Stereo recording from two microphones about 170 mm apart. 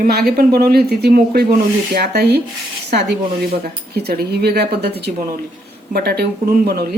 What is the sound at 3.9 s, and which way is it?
Speech, 70° right (ahead or behind).